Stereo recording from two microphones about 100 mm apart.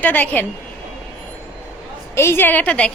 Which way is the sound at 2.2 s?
25° left (ahead or behind).